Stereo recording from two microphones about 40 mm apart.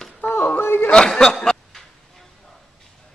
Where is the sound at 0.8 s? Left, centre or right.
Left.